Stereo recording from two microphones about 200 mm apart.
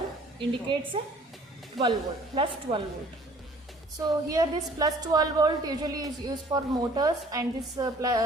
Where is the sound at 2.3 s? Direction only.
25° right (ahead or behind).